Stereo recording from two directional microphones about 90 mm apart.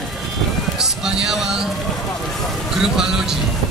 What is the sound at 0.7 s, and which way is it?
Music, 5° right (ahead or behind).